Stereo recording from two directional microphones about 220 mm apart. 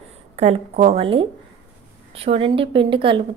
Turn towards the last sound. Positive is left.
turn(degrees=-25)  # may be behind; listen again after turning